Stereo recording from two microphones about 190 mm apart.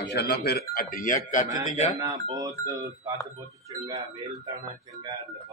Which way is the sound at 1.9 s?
15° right (ahead or behind).